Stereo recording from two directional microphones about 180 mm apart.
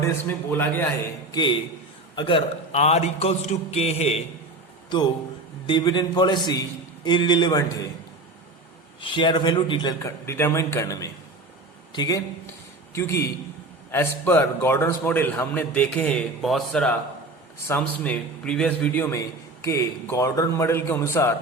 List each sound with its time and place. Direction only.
0.0 s a man's voice: 10° left (ahead or behind)
1.3 s a man's voice: 25° left (ahead or behind)
5.6 s a man's voice: 25° left (ahead or behind)
9.0 s a man's voice: 25° left (ahead or behind)
14.3 s a man's voice: 10° left (ahead or behind)
19.6 s a man's voice: 15° left (ahead or behind)